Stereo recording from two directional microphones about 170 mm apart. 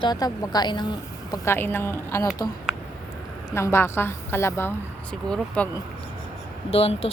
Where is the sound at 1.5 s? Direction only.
15° left (ahead or behind).